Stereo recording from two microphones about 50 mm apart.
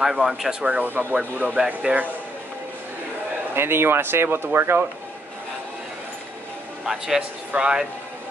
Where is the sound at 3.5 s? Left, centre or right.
Right.